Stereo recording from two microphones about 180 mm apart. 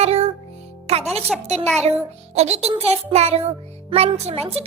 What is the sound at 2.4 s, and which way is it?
A child's voice, 35° right (ahead or behind).